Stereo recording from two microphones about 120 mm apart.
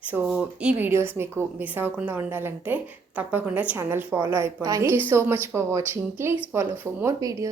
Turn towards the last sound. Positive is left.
turn(degrees=-30)  # may be behind; listen again after turning